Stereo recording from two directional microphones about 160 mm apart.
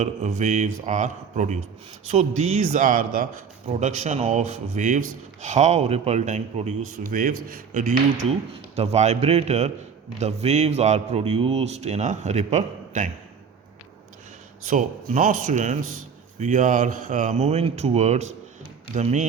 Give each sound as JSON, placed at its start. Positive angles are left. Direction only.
{"t": 0.0, "sound": "speech", "side_deg": -45}
{"t": 3.7, "sound": "speech", "side_deg": -45}
{"t": 8.7, "sound": "speech", "side_deg": -40}
{"t": 14.6, "sound": "speech", "side_deg": -50}